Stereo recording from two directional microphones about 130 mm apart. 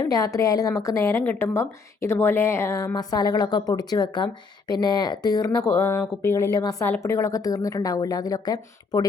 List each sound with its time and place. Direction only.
0.0 s a woman's voice: 25° left (ahead or behind)